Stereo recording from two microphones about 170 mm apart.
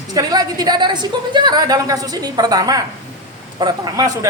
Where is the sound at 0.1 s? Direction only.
20° right (ahead or behind).